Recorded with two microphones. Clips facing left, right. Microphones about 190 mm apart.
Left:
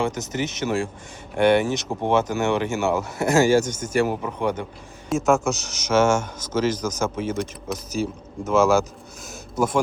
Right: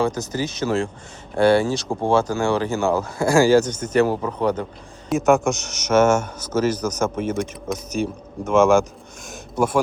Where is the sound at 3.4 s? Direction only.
35° right (ahead or behind).